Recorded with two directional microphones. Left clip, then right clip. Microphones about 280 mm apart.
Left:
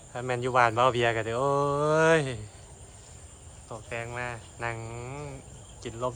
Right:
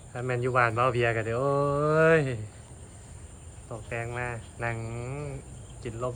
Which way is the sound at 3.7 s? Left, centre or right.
Centre.